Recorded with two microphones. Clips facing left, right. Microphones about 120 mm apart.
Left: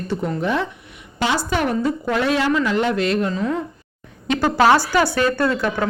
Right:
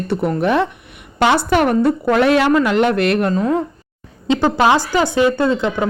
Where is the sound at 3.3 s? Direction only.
45° right (ahead or behind).